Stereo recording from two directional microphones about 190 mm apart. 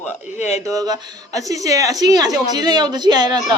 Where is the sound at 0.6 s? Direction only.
20° right (ahead or behind).